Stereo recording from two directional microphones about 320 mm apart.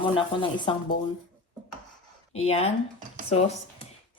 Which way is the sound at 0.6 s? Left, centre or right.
Centre.